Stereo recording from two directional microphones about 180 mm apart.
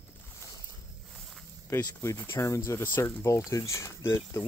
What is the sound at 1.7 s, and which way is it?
Speech, 15° left (ahead or behind).